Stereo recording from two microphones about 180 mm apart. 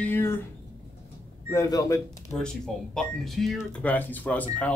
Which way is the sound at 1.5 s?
20° left (ahead or behind).